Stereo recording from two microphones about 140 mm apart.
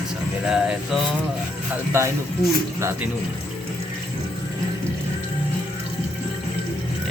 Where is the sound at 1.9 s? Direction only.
15° right (ahead or behind).